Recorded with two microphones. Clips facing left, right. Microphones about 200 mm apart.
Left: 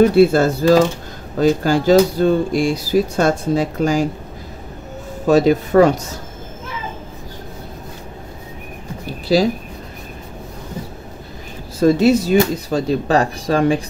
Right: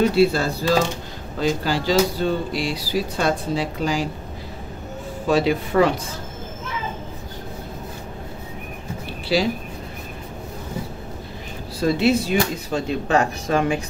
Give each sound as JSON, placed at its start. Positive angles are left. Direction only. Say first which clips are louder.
{"t": 0.1, "sound": "speech", "louder": "left 6 dB", "side_deg": 50}
{"t": 5.2, "sound": "speech", "louder": "left 6 dB", "side_deg": 45}
{"t": 9.0, "sound": "a sound", "louder": "left 6 dB", "side_deg": 40}
{"t": 11.8, "sound": "speech", "louder": "left 6 dB", "side_deg": 45}